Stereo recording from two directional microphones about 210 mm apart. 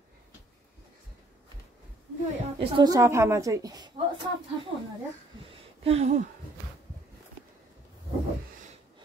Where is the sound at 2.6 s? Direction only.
25° right (ahead or behind).